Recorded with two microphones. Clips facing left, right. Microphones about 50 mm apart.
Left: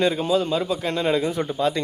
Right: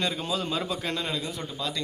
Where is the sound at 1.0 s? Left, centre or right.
Left.